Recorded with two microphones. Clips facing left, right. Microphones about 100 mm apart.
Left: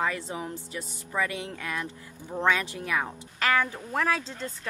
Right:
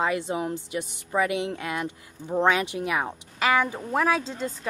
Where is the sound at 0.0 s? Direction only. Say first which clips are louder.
Right 5 dB; 20° right (ahead or behind).